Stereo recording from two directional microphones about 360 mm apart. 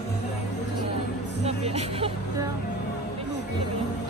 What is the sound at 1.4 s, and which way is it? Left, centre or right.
Speech, centre.